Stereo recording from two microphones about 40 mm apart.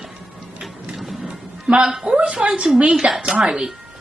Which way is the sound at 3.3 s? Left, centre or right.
Centre.